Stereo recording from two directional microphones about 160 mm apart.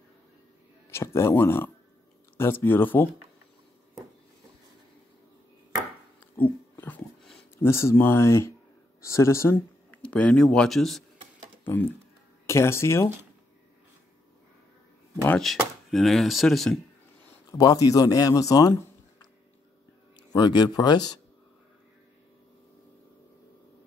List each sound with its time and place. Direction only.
0.8 s speech: 15° left (ahead or behind)
6.3 s dog: 10° left (ahead or behind)
7.5 s speech: 15° left (ahead or behind)
11.6 s speech: 10° left (ahead or behind)
15.2 s speech: 5° left (ahead or behind)
17.5 s speech: 25° left (ahead or behind)
20.3 s speech: 25° left (ahead or behind)